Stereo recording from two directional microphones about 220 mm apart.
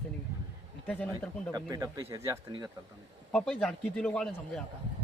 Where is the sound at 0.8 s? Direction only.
5° left (ahead or behind).